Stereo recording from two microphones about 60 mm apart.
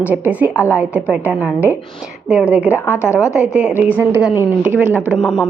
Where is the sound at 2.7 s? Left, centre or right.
Left.